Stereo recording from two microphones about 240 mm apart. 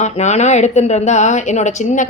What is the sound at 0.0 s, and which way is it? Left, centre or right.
Speech, left.